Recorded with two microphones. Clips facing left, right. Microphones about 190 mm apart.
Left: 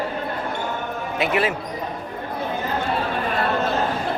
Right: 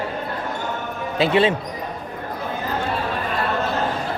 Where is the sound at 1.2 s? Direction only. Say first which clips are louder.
Right 5 dB; 30° right (ahead or behind).